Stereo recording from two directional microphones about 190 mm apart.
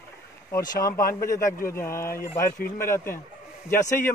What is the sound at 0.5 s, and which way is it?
Speech, 20° left (ahead or behind).